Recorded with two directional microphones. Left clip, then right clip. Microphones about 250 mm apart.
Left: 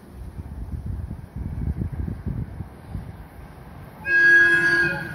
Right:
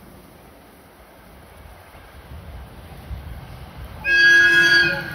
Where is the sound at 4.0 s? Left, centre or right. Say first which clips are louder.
Right 2 dB; centre.